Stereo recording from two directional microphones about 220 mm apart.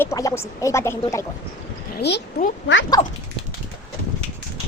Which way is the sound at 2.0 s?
50° left (ahead or behind).